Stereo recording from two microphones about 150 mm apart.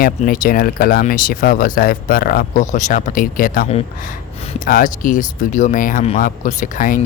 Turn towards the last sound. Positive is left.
turn(degrees=65)  # may be behind; listen again after turning